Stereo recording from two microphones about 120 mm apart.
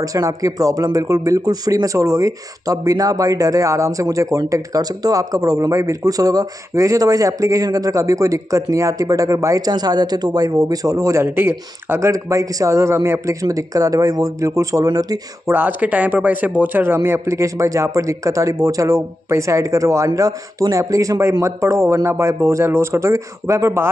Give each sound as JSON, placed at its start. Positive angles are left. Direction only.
{"t": 0.0, "sound": "speech", "side_deg": -30}
{"t": 15.4, "sound": "speech", "side_deg": -15}